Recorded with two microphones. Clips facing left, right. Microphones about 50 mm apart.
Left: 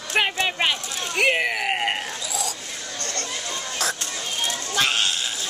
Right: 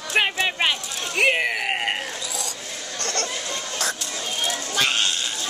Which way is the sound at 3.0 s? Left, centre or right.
Right.